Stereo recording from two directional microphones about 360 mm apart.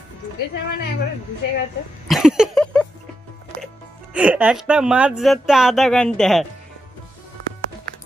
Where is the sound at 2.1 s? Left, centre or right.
Centre.